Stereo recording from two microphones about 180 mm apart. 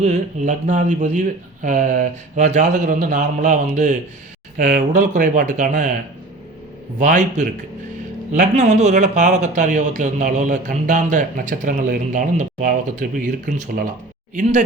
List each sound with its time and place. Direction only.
0.0 s speech: 40° right (ahead or behind)
7.0 s speech: 45° right (ahead or behind)